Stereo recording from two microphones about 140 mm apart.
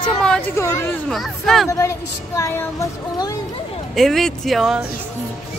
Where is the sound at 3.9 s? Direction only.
Centre (ahead or behind).